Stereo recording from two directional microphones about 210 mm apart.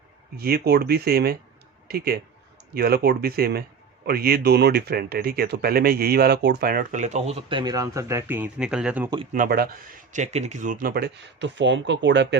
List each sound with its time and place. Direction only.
0.3 s speech: 50° right (ahead or behind); by 9.0 s 5° right (ahead or behind)
9.3 s speech: 40° right (ahead or behind)